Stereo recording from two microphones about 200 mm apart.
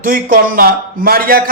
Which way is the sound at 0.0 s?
45° right (ahead or behind).